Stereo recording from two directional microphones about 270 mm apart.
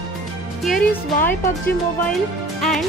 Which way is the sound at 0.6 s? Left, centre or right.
Centre.